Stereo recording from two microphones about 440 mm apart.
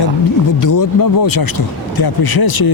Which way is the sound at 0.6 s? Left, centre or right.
Left.